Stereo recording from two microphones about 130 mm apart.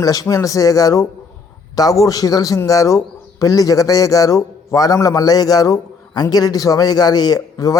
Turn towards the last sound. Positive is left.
turn(degrees=30)  # may be behind; listen again after turning